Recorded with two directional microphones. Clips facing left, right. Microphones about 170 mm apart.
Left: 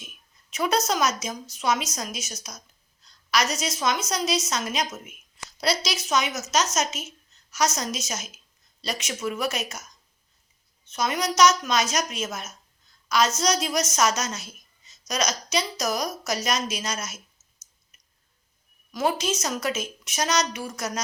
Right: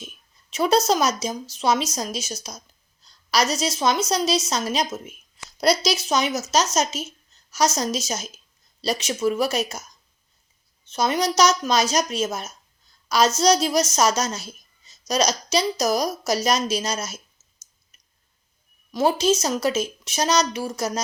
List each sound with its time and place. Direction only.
0.5 s a woman's voice: 30° right (ahead or behind)
10.8 s a woman's voice: 30° right (ahead or behind)
17.9 s a sound: 30° right (ahead or behind)
18.9 s a woman's voice: 30° right (ahead or behind)